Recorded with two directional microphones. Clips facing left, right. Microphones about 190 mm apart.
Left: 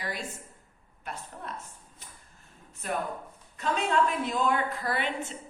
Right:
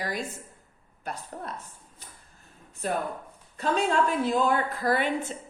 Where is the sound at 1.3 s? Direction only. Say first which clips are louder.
Right 4 dB; 40° right (ahead or behind).